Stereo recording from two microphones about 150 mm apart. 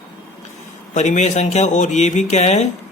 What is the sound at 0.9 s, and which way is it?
Speech, 50° left (ahead or behind).